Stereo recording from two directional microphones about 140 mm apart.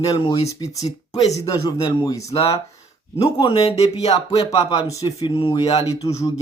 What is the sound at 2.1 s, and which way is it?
Speech, 25° left (ahead or behind).